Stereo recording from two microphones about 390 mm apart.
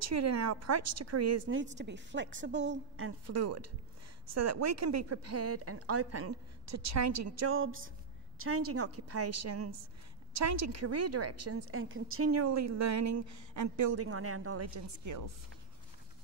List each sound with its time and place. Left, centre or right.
0.0 s a woman's voice: right